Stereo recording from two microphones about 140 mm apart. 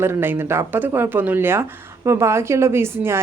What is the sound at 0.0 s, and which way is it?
A woman's voice, 15° right (ahead or behind).